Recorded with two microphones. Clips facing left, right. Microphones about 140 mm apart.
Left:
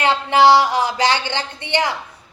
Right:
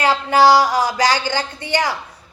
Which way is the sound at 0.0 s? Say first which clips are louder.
Even; 25° left (ahead or behind).